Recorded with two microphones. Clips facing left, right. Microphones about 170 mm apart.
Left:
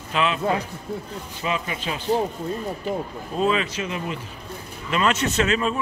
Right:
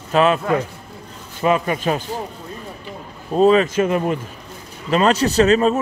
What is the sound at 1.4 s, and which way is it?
Speech, 50° right (ahead or behind).